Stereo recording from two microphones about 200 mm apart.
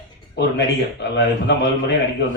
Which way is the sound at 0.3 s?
60° left (ahead or behind).